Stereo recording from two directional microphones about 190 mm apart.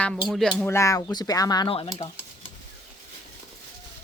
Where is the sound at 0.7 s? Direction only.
15° left (ahead or behind).